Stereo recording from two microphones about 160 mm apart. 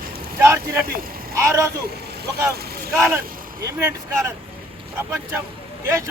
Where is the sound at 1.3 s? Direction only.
20° right (ahead or behind).